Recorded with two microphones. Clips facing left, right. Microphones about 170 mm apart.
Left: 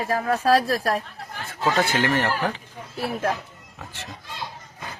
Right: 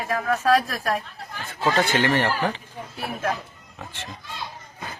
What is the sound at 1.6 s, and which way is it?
Speech, centre (ahead or behind).